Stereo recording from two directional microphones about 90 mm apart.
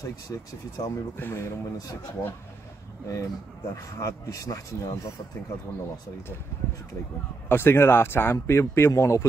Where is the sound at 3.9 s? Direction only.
40° left (ahead or behind).